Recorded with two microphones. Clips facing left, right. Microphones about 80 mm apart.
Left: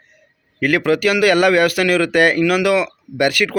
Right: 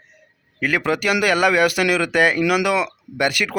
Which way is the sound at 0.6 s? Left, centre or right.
Centre.